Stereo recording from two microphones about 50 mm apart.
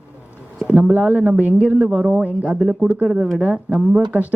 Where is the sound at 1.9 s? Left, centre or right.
Centre.